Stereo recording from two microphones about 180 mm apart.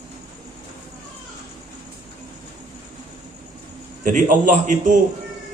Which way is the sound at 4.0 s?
45° right (ahead or behind).